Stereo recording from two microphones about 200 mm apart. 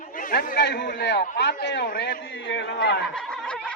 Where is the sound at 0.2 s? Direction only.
45° left (ahead or behind); by 3.0 s 60° left (ahead or behind).